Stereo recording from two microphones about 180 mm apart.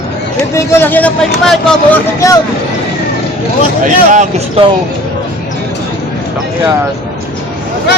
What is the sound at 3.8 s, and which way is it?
Speech, 45° right (ahead or behind).